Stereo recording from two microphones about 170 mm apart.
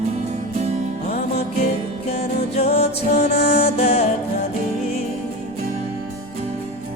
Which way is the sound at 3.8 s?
40° left (ahead or behind).